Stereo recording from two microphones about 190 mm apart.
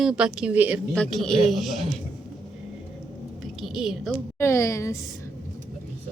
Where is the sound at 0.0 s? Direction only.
5° right (ahead or behind).